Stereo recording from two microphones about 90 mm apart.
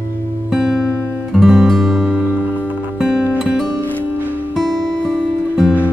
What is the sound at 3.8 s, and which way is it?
Music, 20° left (ahead or behind).